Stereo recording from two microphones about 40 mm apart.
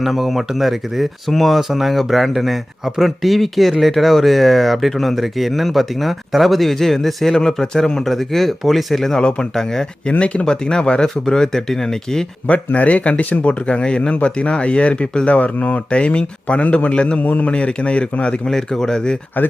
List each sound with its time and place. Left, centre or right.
0.0 s speech: centre
9.1 s speech: centre
10.1 s speech: left
10.4 s speech: centre
12.5 s a man's voice: left
17.2 s speech: left
17.5 s a man's voice: left
18.4 s speech: centre